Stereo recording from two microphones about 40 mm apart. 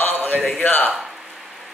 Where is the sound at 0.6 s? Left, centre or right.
Left.